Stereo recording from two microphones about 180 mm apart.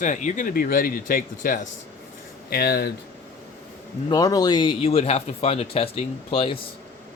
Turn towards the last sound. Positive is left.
turn(degrees=30)  # may be behind; listen again after turning